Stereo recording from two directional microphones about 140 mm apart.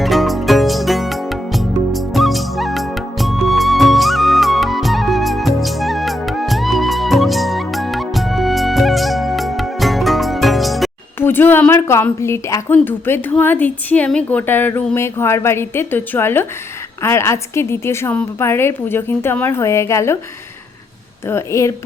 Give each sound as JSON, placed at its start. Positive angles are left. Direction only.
{"t": 0.0, "sound": "music", "side_deg": 0}
{"t": 11.2, "sound": "a sound", "side_deg": 15}
{"t": 12.7, "sound": "a woman's voice", "side_deg": 15}
{"t": 21.2, "sound": "a woman's voice", "side_deg": 20}